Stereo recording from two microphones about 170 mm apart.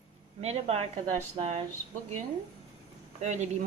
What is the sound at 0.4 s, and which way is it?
Speech, 40° right (ahead or behind).